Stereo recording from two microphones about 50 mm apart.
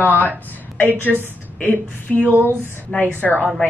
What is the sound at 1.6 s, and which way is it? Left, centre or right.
Speech, left.